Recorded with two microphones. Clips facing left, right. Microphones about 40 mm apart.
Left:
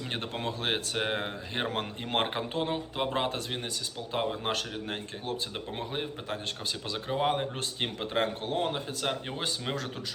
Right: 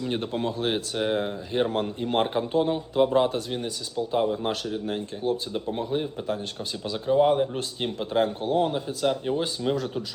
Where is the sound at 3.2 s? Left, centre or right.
Left.